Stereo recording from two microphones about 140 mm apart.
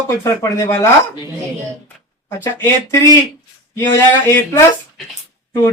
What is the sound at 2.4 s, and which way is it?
Speech, 15° left (ahead or behind).